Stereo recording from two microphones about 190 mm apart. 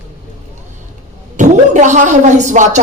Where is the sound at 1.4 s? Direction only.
40° right (ahead or behind).